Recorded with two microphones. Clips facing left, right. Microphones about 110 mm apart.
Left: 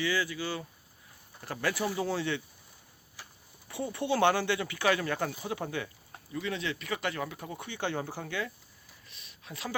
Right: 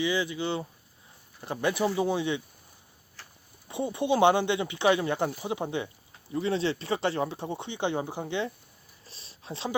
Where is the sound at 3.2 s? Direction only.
10° left (ahead or behind).